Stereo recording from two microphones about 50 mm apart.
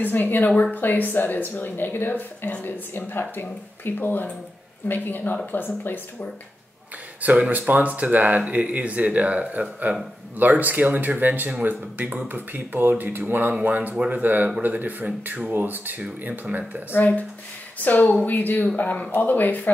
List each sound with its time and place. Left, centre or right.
0.0 s speech: left
7.2 s speech: right
13.9 s speech: right
14.2 s speech: right
16.9 s speech: left